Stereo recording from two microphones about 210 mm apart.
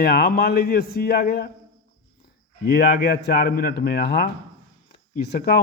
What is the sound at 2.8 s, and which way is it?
Speech, 50° left (ahead or behind).